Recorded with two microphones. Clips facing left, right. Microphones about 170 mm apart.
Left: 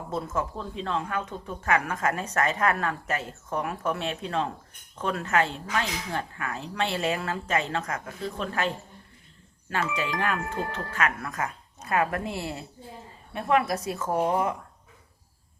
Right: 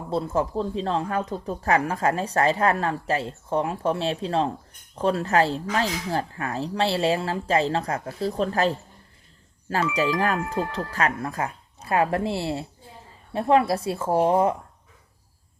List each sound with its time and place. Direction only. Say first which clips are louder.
0.1 s a woman's voice: right 6 dB; 30° right (ahead or behind)
9.9 s a woman's voice: right 7 dB; 35° right (ahead or behind)